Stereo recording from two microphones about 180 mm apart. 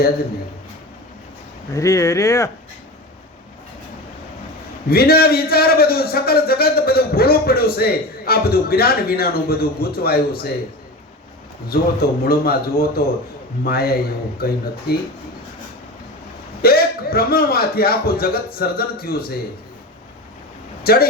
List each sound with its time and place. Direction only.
1.7 s speech: 15° left (ahead or behind)
4.9 s a man's voice: 55° left (ahead or behind)
11.7 s a man's voice: 55° left (ahead or behind)
16.6 s a man's voice: 55° left (ahead or behind)
20.8 s speech: 55° left (ahead or behind)